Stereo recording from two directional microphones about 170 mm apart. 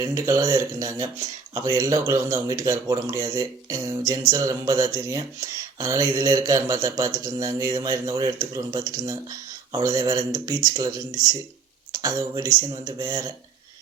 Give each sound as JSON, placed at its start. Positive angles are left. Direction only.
{"t": 0.0, "sound": "speech", "side_deg": -20}